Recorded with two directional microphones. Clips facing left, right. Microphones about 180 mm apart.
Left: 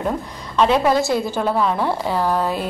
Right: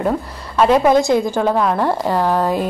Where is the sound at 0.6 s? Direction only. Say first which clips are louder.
Right 3 dB; 5° right (ahead or behind).